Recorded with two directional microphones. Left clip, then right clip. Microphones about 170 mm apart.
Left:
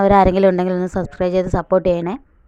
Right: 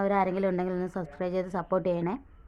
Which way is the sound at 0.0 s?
50° left (ahead or behind).